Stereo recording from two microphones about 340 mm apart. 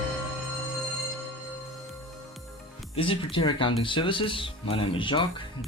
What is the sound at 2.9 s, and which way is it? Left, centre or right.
Speech, centre.